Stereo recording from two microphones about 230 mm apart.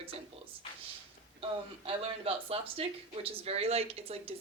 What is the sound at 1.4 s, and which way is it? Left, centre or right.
Speech, right.